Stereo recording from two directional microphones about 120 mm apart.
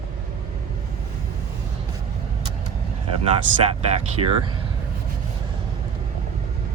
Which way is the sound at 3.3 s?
55° right (ahead or behind).